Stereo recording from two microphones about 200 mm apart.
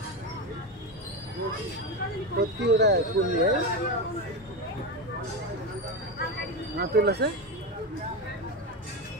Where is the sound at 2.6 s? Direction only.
55° right (ahead or behind).